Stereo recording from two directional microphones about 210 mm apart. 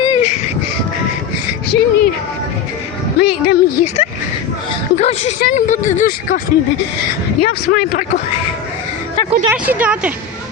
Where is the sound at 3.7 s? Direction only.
30° left (ahead or behind).